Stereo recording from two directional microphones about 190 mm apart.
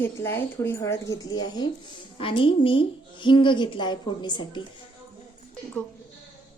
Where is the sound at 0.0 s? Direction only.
15° left (ahead or behind).